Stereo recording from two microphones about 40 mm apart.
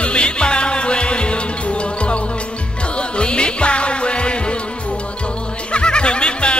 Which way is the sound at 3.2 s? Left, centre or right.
Left.